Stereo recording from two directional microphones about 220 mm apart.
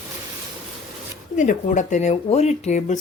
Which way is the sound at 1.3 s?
35° left (ahead or behind).